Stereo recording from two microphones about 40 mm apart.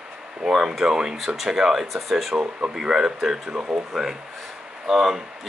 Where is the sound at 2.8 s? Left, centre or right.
Centre.